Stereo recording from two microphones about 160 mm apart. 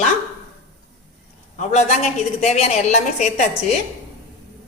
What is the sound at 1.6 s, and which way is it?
A woman's voice, 45° left (ahead or behind).